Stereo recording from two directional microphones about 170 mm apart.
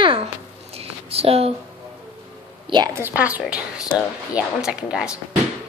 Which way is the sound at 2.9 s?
10° right (ahead or behind).